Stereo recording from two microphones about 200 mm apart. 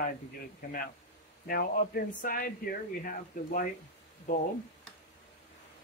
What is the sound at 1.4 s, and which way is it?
A man's voice, 45° left (ahead or behind).